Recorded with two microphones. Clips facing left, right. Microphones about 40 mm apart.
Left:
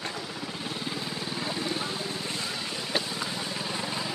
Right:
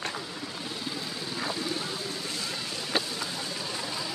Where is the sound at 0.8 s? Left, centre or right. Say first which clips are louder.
Left 2 dB; left.